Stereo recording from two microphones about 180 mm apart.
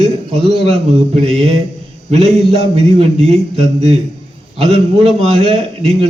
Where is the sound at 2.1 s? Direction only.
35° right (ahead or behind).